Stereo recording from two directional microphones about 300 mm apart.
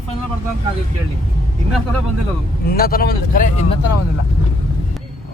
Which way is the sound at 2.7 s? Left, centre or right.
Left.